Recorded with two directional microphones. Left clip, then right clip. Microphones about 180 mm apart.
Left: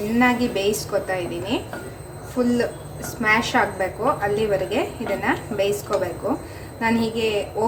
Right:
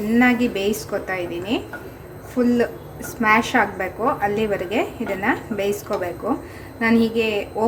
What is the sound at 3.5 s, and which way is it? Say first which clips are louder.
A woman's voice: right 1 dB; 20° right (ahead or behind).